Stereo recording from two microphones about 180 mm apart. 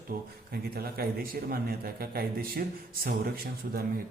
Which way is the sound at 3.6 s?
55° right (ahead or behind).